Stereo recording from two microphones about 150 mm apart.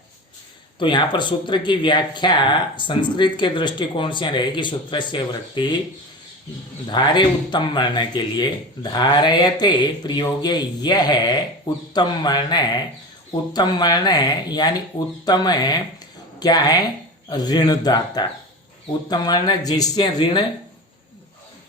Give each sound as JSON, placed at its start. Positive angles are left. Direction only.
{"t": 0.8, "sound": "speech", "side_deg": 30}
{"t": 6.9, "sound": "speech", "side_deg": 30}